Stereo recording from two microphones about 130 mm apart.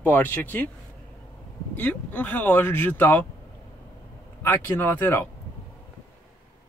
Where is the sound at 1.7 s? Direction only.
10° left (ahead or behind).